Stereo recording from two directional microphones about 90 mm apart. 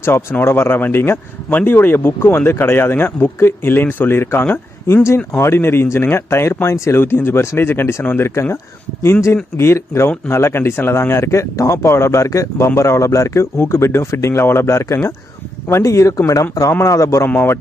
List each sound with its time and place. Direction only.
0.0 s speech: 25° left (ahead or behind)
17.2 s speech: 25° left (ahead or behind)